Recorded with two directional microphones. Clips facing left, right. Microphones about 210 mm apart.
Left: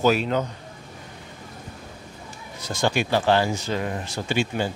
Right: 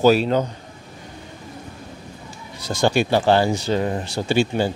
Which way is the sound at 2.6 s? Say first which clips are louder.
Right 5 dB; 35° right (ahead or behind).